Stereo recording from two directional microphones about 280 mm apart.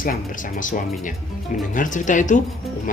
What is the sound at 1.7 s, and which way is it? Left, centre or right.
Speech, left.